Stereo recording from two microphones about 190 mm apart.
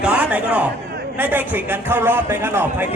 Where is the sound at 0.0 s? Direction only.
5° right (ahead or behind).